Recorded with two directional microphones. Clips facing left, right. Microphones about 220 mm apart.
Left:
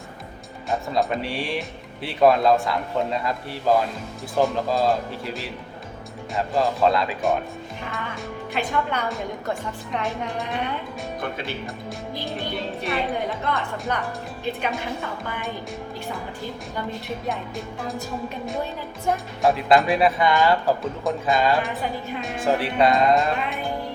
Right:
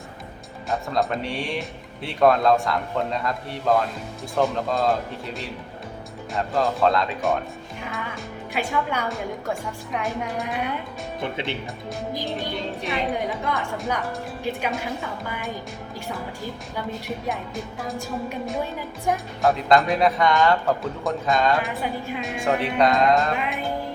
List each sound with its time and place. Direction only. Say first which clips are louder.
0.7 s speech: left 1 dB; centre (ahead or behind)
11.2 s speech: right 3 dB; 25° right (ahead or behind)
12.5 s speech: left 1 dB; centre (ahead or behind)
15.3 s speech: even; centre (ahead or behind)
17.2 s speech: even; centre (ahead or behind)
19.1 s speech: left 1 dB; centre (ahead or behind)